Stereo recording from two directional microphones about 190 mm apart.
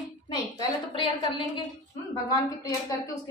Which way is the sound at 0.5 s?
25° left (ahead or behind).